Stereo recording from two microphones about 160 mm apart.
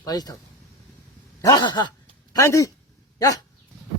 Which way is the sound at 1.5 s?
25° left (ahead or behind).